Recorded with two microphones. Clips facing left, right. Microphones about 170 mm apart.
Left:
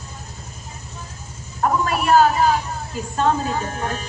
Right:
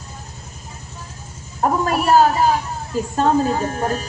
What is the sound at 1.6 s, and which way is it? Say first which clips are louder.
Speech: right 2 dB; 35° right (ahead or behind).